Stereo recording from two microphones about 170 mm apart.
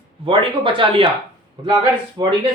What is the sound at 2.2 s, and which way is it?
Speech, 20° right (ahead or behind).